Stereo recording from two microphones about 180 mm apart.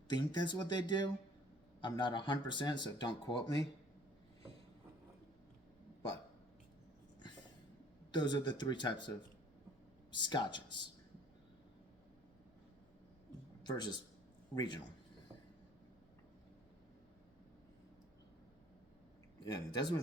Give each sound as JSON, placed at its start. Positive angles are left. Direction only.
{"t": 0.1, "sound": "speech", "side_deg": 25}
{"t": 8.1, "sound": "speech", "side_deg": 25}
{"t": 10.1, "sound": "speech", "side_deg": 25}
{"t": 13.7, "sound": "a man's voice", "side_deg": 25}
{"t": 19.5, "sound": "speech", "side_deg": 25}